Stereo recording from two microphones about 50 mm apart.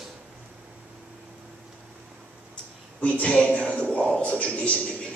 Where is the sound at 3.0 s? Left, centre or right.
Left.